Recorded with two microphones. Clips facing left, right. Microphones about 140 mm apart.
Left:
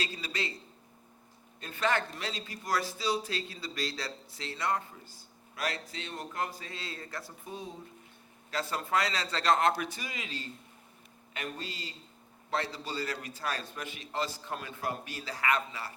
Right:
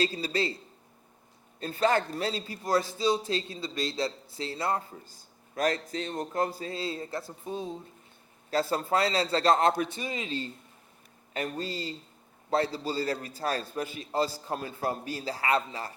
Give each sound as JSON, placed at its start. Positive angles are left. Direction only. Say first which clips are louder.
{"t": 0.0, "sound": "a man's voice", "louder": "right 8 dB", "side_deg": -35}
{"t": 1.5, "sound": "a man's voice", "louder": "right 5 dB", "side_deg": -35}
{"t": 11.3, "sound": "a man's voice", "louder": "right 7 dB", "side_deg": -40}